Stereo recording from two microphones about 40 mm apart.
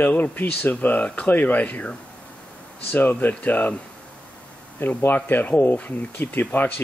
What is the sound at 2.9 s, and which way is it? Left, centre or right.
Speech, left.